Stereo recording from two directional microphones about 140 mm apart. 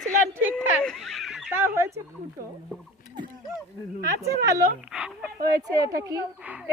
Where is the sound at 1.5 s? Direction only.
20° right (ahead or behind).